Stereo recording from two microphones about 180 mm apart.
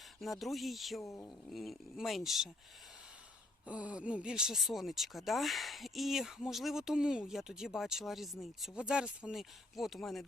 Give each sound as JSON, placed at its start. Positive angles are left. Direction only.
{"t": 0.2, "sound": "speech", "side_deg": 0}
{"t": 1.0, "sound": "speech", "side_deg": 15}
{"t": 1.5, "sound": "speech", "side_deg": 0}
{"t": 3.7, "sound": "speech", "side_deg": -5}